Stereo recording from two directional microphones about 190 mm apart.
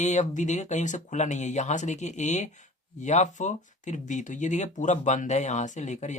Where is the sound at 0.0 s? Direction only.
40° left (ahead or behind).